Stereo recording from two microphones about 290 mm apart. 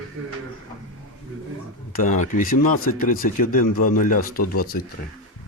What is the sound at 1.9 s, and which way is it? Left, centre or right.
Speech, left.